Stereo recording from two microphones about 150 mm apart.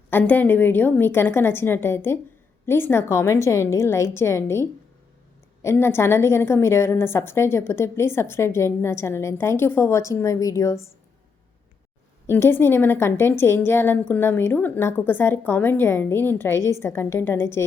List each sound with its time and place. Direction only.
0.1 s a woman's voice: 15° left (ahead or behind)
12.3 s a woman's voice: 15° left (ahead or behind)